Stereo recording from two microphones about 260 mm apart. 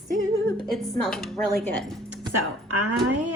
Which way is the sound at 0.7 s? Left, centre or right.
Centre.